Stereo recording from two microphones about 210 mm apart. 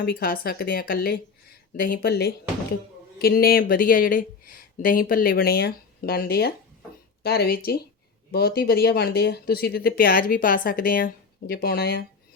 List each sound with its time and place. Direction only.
0.0 s speech: 45° left (ahead or behind)